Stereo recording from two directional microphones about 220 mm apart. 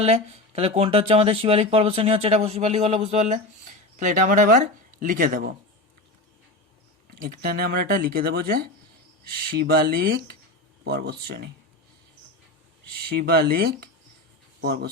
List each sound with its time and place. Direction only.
0.0 s speech: 30° right (ahead or behind)
7.2 s speech: 45° right (ahead or behind)
13.1 s speech: 45° right (ahead or behind)